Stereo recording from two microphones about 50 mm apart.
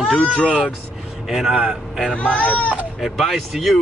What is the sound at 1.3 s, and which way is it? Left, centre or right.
Speech, centre.